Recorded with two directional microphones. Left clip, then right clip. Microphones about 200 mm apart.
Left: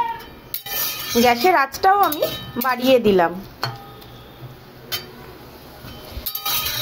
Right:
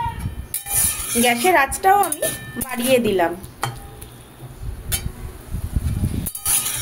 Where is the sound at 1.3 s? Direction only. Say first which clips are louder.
Right 1 dB; 20° left (ahead or behind).